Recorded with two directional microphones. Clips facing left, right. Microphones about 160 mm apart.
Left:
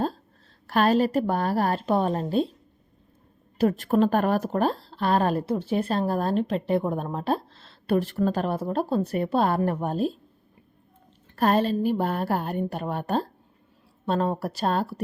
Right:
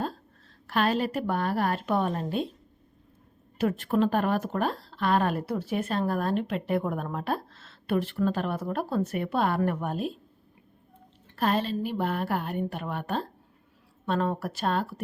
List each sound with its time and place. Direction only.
0.7 s a woman's voice: 40° left (ahead or behind)
3.6 s a woman's voice: 35° left (ahead or behind)
11.3 s a woman's voice: 45° left (ahead or behind)